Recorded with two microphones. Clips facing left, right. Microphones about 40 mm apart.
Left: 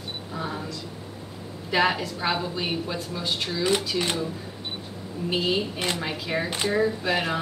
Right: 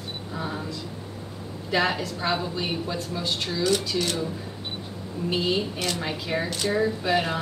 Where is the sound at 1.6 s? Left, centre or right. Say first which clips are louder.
Left 1 dB; centre.